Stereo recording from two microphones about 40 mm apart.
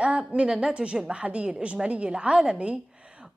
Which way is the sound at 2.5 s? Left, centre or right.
Right.